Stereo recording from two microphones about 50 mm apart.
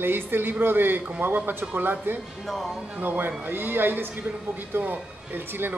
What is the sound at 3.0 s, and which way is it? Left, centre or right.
Speech, right.